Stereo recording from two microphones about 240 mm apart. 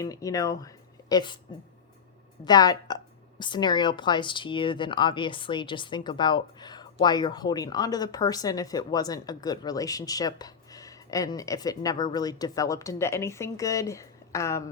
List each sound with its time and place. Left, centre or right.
0.0 s a woman's voice: centre
2.4 s a woman's voice: centre